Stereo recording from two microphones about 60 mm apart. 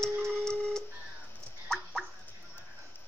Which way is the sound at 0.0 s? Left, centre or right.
Centre.